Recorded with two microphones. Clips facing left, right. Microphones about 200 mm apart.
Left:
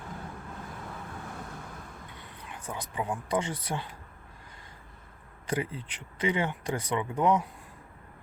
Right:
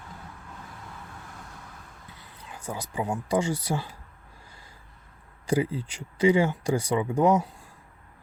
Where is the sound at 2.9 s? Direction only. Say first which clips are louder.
Right 3 dB; 25° right (ahead or behind).